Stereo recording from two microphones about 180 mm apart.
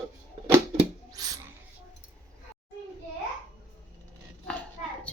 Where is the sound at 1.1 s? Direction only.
20° right (ahead or behind).